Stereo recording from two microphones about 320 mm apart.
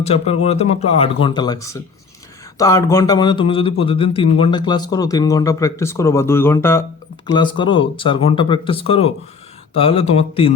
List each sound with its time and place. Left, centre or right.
0.0 s speech: centre